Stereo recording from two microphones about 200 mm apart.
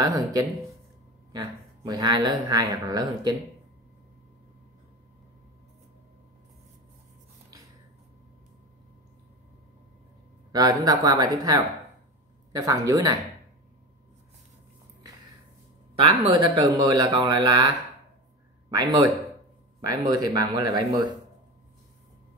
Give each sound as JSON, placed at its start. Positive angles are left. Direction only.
{"t": 0.0, "sound": "speech", "side_deg": -20}
{"t": 10.5, "sound": "speech", "side_deg": -20}
{"t": 16.0, "sound": "speech", "side_deg": -25}